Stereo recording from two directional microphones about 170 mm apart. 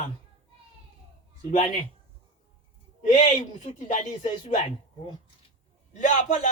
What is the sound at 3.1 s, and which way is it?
A man's voice, 45° left (ahead or behind).